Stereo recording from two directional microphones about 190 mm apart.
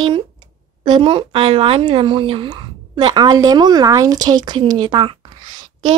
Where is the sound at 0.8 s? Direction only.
25° right (ahead or behind).